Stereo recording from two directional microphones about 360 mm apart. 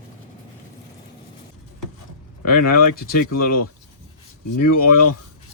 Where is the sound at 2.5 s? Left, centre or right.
Left.